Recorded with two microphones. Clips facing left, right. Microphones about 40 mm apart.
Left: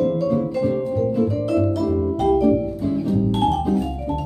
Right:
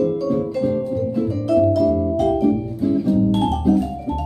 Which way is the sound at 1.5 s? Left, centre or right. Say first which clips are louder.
Right 7 dB; centre.